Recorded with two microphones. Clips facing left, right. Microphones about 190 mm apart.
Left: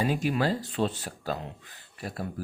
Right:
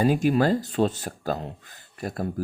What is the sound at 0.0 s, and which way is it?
Speech, 45° right (ahead or behind).